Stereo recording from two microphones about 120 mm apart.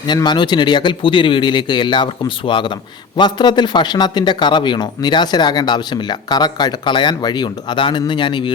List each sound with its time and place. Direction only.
0.1 s speech: 40° left (ahead or behind)